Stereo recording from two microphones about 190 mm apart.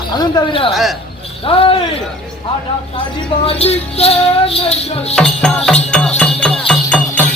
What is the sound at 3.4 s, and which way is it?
Music, 35° left (ahead or behind).